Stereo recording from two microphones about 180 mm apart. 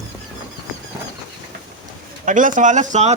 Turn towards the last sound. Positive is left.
turn(degrees=-40)  # may be behind; listen again after turning